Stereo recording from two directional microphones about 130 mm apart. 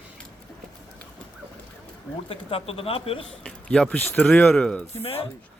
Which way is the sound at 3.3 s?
5° left (ahead or behind).